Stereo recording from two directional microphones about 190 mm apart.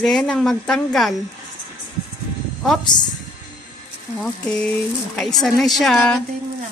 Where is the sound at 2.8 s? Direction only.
25° left (ahead or behind).